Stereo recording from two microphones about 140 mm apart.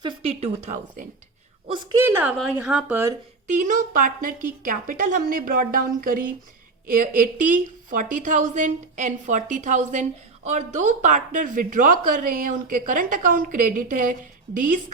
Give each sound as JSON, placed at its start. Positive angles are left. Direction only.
{"t": 0.0, "sound": "speech", "side_deg": -35}
{"t": 0.3, "sound": "speech", "side_deg": -55}
{"t": 1.6, "sound": "a woman's voice", "side_deg": -35}
{"t": 2.0, "sound": "speech", "side_deg": -15}
{"t": 2.4, "sound": "speech", "side_deg": -5}
{"t": 2.9, "sound": "speech", "side_deg": -20}
{"t": 3.7, "sound": "a woman's voice", "side_deg": -75}